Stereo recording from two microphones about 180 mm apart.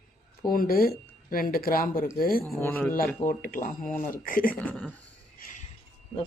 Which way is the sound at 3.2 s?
50° left (ahead or behind).